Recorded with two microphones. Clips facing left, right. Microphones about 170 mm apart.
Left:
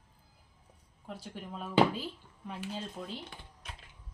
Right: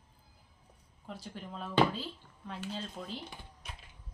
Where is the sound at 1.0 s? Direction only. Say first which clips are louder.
Left 1 dB; 5° left (ahead or behind).